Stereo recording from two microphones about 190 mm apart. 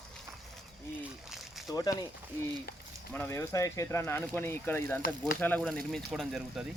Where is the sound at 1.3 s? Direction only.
Centre (ahead or behind).